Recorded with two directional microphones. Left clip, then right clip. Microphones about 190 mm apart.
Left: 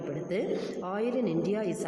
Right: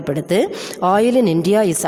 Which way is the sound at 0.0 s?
55° right (ahead or behind).